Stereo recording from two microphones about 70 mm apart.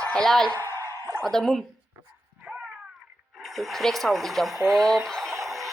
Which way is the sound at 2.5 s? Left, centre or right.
Right.